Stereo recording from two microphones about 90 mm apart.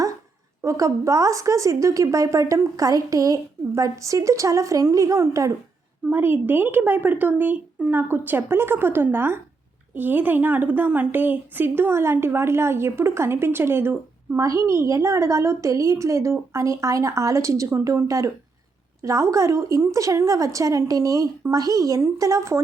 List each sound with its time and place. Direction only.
0.6 s a woman's voice: 35° right (ahead or behind)
6.1 s a woman's voice: 25° right (ahead or behind)